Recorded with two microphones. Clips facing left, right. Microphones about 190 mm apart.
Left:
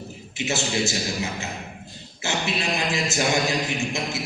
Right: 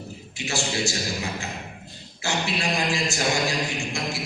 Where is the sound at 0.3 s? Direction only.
20° left (ahead or behind).